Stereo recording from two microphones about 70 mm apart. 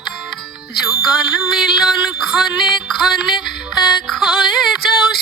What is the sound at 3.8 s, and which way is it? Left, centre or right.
Music, centre.